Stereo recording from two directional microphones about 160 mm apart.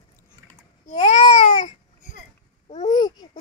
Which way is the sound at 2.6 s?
45° left (ahead or behind).